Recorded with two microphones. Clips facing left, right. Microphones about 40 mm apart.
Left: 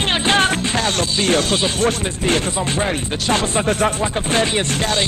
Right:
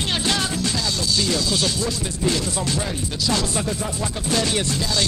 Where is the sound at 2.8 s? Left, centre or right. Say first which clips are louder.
Left 5 dB; left.